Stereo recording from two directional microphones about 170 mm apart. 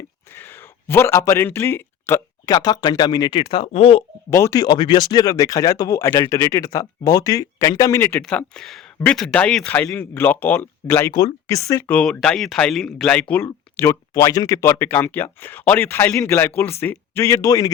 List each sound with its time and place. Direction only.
0.3 s speech: 10° left (ahead or behind); by 4.0 s 35° left (ahead or behind)
4.3 s speech: 15° left (ahead or behind)
11.1 s speech: 25° left (ahead or behind)